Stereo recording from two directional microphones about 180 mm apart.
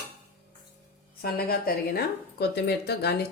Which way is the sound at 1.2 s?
60° left (ahead or behind).